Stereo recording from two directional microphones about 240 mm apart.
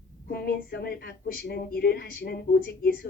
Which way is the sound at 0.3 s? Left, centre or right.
Left.